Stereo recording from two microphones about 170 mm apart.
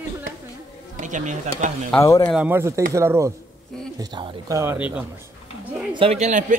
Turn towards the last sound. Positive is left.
turn(degrees=-40)  # may be behind; listen again after turning